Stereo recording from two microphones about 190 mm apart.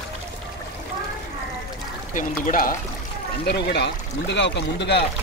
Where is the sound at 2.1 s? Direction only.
45° left (ahead or behind).